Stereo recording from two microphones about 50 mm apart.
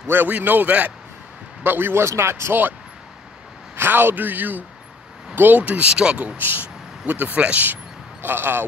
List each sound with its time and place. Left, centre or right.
0.0 s a man's voice: right
0.3 s a man's voice: right
1.6 s a man's voice: right
2.0 s speech: right
3.7 s a man's voice: right
5.6 s speech: right